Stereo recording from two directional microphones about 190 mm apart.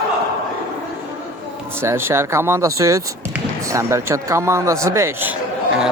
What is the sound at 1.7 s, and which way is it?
Speech, 15° right (ahead or behind).